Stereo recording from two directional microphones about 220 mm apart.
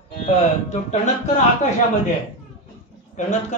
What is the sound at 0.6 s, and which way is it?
Speech, 35° left (ahead or behind).